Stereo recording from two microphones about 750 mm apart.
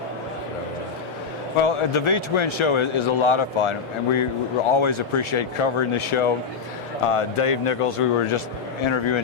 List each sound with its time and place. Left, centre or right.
1.6 s a man's voice: left